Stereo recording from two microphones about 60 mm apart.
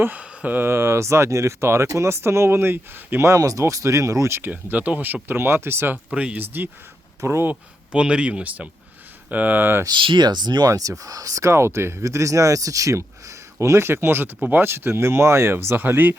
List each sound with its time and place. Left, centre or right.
0.0 s speech: right
3.2 s speech: right
4.5 s speech: right
6.1 s speech: right
6.4 s speech: right
7.2 s speech: right
7.9 s speech: centre; by 9.8 s right
10.6 s speech: right
11.5 s speech: right
12.0 s speech: right